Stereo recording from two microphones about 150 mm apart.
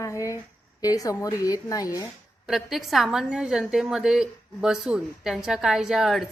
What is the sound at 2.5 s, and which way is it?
A woman's voice, centre (ahead or behind).